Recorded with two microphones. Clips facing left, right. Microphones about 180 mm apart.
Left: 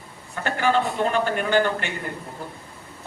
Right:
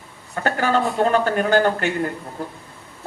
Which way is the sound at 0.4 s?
40° right (ahead or behind).